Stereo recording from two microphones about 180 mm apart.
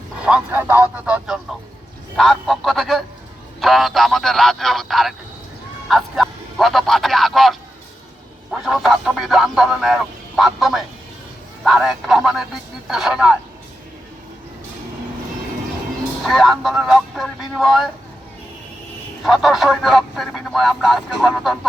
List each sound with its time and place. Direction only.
0.2 s speech: 5° right (ahead or behind)
8.6 s speech: centre (ahead or behind)
16.2 s speech: centre (ahead or behind)
19.2 s speech: centre (ahead or behind)